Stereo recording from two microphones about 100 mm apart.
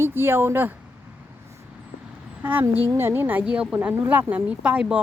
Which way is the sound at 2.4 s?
20° right (ahead or behind).